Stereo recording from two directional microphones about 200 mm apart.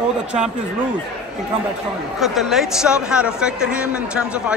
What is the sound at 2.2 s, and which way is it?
Speech, centre (ahead or behind).